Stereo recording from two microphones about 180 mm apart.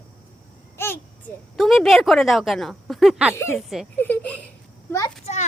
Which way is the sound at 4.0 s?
10° left (ahead or behind).